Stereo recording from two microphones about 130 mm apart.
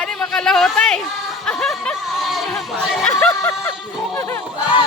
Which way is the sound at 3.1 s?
20° left (ahead or behind).